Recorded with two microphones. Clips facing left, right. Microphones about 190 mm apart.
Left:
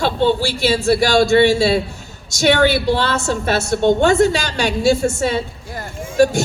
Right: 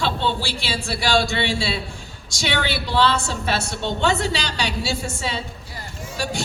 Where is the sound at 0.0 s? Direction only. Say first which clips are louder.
Left 7 dB; 45° left (ahead or behind).